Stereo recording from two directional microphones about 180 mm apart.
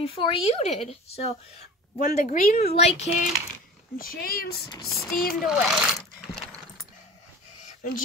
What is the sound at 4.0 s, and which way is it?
Speech, 55° left (ahead or behind).